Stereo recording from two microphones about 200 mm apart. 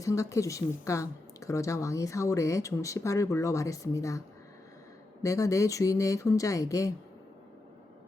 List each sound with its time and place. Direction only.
0.0 s speech: 15° left (ahead or behind)
5.2 s speech: 15° left (ahead or behind)